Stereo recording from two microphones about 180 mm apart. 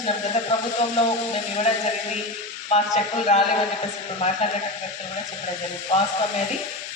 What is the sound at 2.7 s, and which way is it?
Speech, 35° left (ahead or behind).